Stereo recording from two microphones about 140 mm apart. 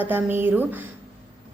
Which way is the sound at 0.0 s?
15° right (ahead or behind).